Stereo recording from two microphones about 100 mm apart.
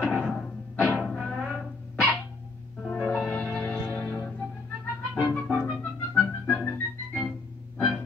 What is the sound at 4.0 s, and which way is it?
Music, 20° left (ahead or behind).